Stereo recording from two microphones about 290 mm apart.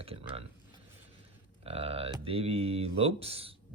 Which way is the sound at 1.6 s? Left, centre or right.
Centre.